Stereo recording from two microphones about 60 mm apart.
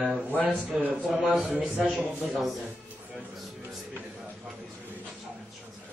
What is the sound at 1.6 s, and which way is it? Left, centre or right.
Mantra, centre.